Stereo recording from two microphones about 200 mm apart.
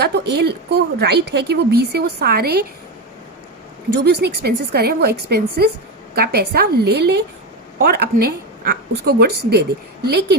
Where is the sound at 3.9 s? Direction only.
55° right (ahead or behind).